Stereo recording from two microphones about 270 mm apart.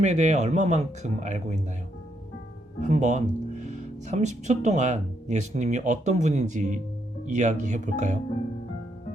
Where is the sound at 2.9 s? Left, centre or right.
Right.